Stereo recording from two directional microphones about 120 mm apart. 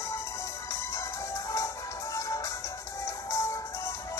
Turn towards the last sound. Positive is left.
turn(degrees=25)  # may be behind; listen again after turning